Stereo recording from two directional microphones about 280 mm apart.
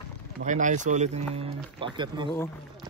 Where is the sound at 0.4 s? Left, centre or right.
Right.